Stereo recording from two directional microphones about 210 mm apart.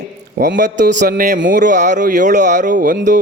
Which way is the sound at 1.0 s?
40° right (ahead or behind).